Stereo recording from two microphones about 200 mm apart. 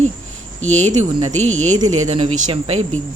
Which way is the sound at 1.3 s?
85° right.